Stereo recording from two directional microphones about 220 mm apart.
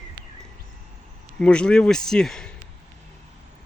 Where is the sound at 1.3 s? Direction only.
5° left (ahead or behind).